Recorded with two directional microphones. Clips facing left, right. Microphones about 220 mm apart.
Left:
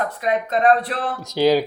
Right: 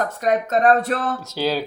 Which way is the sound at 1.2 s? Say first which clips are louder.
Left 6 dB; 15° left (ahead or behind).